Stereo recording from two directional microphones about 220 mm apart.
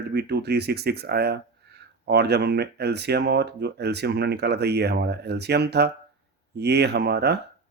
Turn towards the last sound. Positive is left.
turn(degrees=-50)  # may be behind; listen again after turning